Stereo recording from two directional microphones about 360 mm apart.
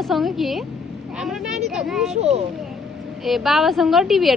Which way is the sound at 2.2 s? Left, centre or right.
Centre.